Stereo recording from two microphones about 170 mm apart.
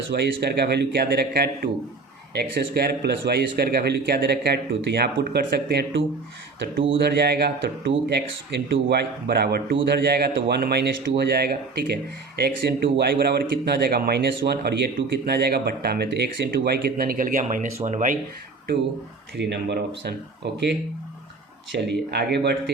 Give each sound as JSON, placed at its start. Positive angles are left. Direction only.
{"t": 0.1, "sound": "speech", "side_deg": -75}
{"t": 19.4, "sound": "speech", "side_deg": -90}